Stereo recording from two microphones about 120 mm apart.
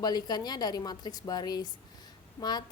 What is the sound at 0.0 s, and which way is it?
A woman's voice, 35° left (ahead or behind).